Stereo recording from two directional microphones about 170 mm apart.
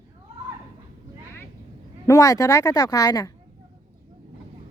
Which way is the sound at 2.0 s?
20° left (ahead or behind).